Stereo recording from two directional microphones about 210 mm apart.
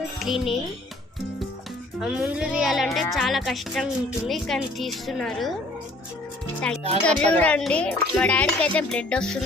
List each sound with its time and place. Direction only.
0.2 s a child's voice: centre (ahead or behind)
2.0 s a child's voice: 5° right (ahead or behind)
7.0 s a child's voice: 5° left (ahead or behind)